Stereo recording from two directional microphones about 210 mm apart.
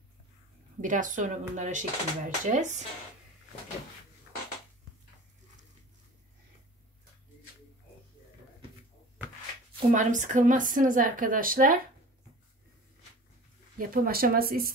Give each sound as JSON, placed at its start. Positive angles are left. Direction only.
{"t": 0.7, "sound": "speech", "side_deg": -35}
{"t": 9.9, "sound": "speech", "side_deg": -35}
{"t": 13.7, "sound": "speech", "side_deg": -45}